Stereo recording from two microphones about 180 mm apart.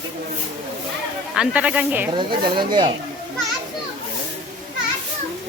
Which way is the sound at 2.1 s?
25° right (ahead or behind).